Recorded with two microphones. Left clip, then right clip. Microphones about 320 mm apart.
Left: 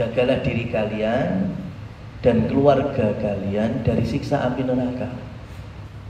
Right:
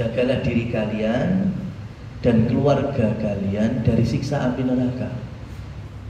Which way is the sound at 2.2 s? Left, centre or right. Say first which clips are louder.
Left 2 dB; centre.